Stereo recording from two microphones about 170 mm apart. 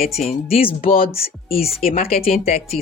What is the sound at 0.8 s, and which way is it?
Speech, 55° left (ahead or behind).